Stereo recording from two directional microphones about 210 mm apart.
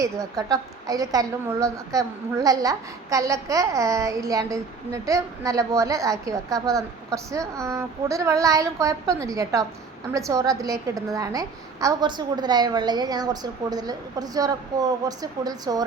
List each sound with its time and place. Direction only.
0.0 s a woman's voice: 15° right (ahead or behind)